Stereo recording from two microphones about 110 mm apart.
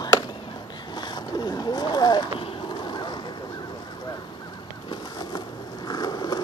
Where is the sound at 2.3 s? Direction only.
50° left (ahead or behind).